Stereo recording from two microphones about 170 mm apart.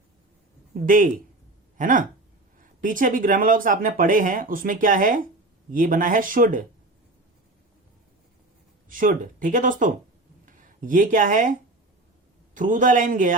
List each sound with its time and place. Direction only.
0.9 s speech: 55° right (ahead or behind)
8.9 s speech: 50° right (ahead or behind)
12.5 s speech: 50° right (ahead or behind)